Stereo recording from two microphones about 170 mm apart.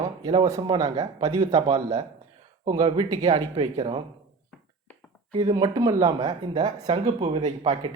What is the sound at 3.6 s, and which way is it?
Speech, 30° right (ahead or behind).